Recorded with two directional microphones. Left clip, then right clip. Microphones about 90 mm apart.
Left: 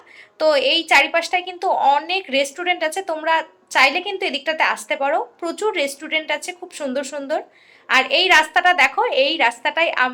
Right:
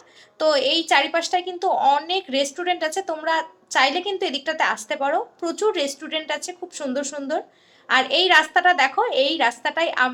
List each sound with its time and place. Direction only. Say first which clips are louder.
0.3 s a woman's voice: left 3 dB; 20° left (ahead or behind)